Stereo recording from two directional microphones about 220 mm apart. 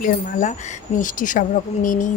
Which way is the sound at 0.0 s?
35° left (ahead or behind).